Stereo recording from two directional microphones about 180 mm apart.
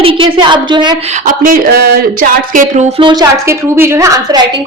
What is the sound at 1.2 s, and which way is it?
Speech, 50° right (ahead or behind).